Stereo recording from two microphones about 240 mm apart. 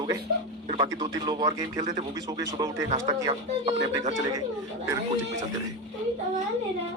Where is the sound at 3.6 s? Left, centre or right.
Right.